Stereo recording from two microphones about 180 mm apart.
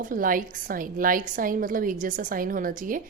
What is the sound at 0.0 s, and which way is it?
A woman's voice, 50° right (ahead or behind).